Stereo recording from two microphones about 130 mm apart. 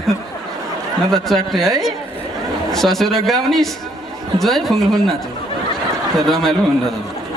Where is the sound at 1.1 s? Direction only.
Centre (ahead or behind).